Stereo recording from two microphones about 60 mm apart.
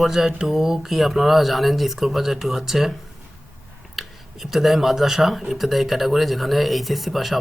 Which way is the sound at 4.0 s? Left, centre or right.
Centre.